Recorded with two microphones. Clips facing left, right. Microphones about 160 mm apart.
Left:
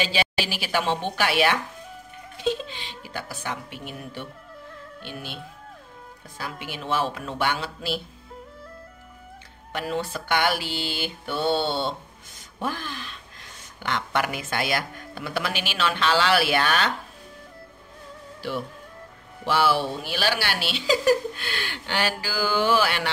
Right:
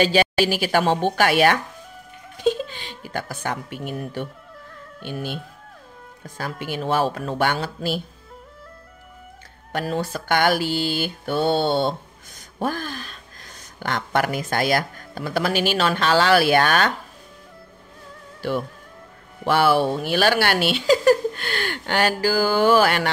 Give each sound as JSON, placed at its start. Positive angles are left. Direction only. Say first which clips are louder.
{"t": 0.0, "sound": "speech", "louder": "right 8 dB", "side_deg": -45}
{"t": 9.7, "sound": "speech", "louder": "right 3 dB", "side_deg": -40}
{"t": 19.4, "sound": "speech", "louder": "right 5 dB", "side_deg": -55}